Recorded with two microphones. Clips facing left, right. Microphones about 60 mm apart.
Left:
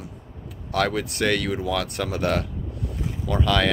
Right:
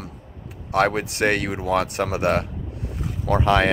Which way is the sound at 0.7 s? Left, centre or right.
Right.